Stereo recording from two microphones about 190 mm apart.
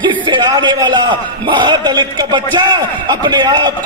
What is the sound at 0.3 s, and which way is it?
A man's voice, 20° right (ahead or behind).